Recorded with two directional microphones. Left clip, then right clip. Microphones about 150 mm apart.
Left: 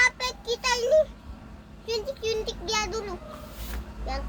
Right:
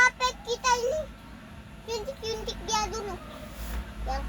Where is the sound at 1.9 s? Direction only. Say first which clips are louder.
Left 4 dB; 25° left (ahead or behind).